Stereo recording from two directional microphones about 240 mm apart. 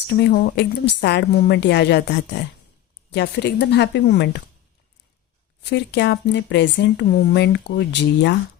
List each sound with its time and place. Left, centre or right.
0.1 s speech: left
5.7 s speech: left